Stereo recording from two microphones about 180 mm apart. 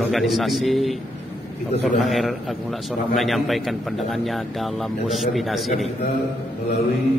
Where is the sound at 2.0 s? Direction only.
Centre (ahead or behind).